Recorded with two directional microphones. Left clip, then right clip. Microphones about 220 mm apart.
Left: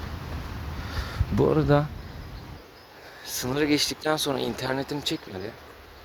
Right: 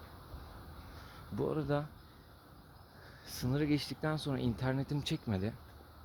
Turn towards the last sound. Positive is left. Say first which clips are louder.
# left 8 dB
turn(degrees=-20)  # may be behind; listen again after turning